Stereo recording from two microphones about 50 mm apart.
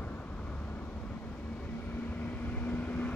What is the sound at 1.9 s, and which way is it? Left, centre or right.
Vehicle, left.